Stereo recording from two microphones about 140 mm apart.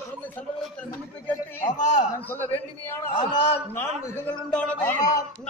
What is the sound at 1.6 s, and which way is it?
Speech, 60° left (ahead or behind).